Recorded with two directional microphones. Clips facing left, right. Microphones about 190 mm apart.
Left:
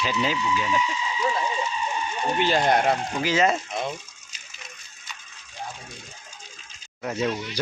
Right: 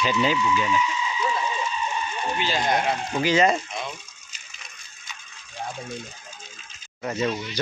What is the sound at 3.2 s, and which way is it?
Speech, 5° left (ahead or behind).